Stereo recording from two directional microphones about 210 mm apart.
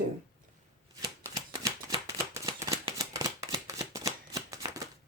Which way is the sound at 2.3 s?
15° right (ahead or behind).